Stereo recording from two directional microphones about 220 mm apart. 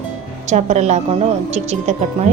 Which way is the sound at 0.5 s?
30° right (ahead or behind).